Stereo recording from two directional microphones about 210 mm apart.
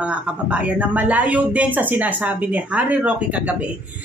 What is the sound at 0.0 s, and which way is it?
Speech, 5° right (ahead or behind).